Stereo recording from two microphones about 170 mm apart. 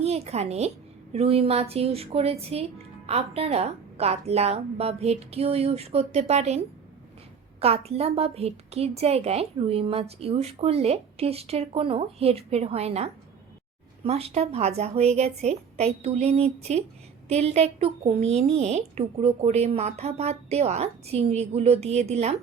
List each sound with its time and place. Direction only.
0.0 s a woman's voice: 40° right (ahead or behind)
7.6 s speech: 35° right (ahead or behind)